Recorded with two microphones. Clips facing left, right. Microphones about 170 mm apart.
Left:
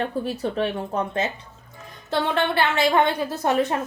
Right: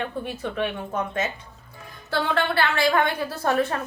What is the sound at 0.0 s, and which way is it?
A woman's voice, 35° left (ahead or behind).